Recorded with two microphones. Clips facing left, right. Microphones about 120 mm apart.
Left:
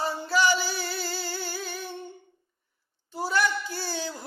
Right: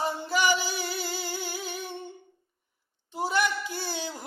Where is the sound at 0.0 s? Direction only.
15° right (ahead or behind).